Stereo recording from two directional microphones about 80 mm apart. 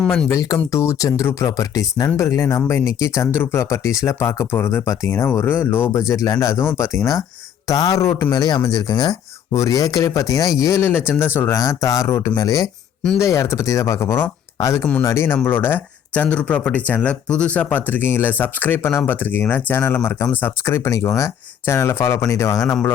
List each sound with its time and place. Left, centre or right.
0.3 s speech: left
6.1 s speech: left
9.6 s speech: left
11.5 s speech: left
16.2 s speech: centre; by 22.2 s left
22.2 s speech: left